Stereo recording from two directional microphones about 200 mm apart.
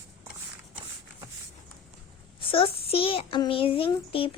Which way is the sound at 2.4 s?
25° left (ahead or behind).